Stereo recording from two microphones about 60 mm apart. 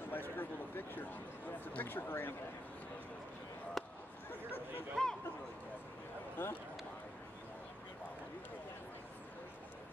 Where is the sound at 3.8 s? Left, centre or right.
Centre.